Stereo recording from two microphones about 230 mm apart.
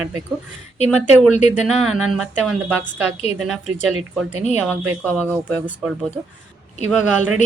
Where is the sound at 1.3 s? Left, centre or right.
Left.